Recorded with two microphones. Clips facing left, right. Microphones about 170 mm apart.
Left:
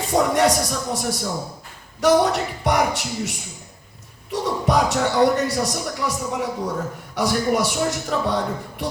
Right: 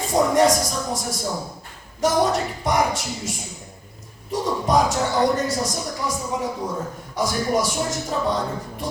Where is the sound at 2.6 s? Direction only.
65° left (ahead or behind).